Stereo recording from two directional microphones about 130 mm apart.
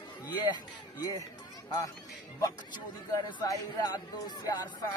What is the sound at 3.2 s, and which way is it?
Speech, 30° left (ahead or behind).